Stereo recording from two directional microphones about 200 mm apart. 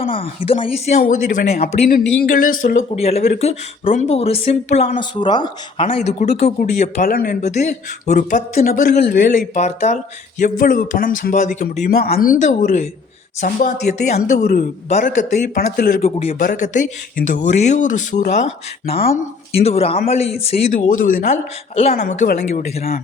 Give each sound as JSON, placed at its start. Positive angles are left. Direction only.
{"t": 0.0, "sound": "speech", "side_deg": 25}
{"t": 4.9, "sound": "speech", "side_deg": 20}
{"t": 16.0, "sound": "speech", "side_deg": 30}
{"t": 16.3, "sound": "speech", "side_deg": 45}
{"t": 20.7, "sound": "speech", "side_deg": 45}
{"t": 22.2, "sound": "speech", "side_deg": 45}